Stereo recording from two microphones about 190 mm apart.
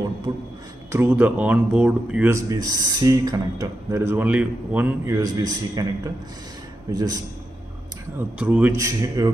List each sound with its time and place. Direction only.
0.9 s speech: 10° right (ahead or behind)
6.9 s a man's voice: 20° right (ahead or behind)
8.4 s speech: 5° right (ahead or behind)